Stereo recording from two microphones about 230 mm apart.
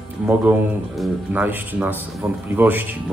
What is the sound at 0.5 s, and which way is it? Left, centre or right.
Speech, centre.